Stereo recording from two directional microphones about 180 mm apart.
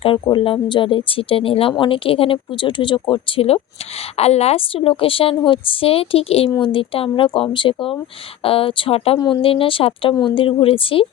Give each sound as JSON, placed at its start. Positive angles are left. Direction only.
{"t": 0.0, "sound": "speech", "side_deg": 30}